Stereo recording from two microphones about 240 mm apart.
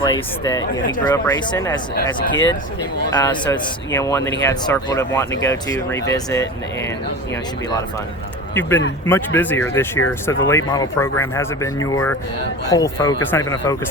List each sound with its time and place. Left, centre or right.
0.0 s speech: centre
2.3 s speech: left
3.2 s speech: centre
9.0 s speech: centre